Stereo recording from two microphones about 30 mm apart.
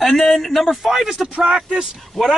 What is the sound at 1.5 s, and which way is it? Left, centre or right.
Speech, right.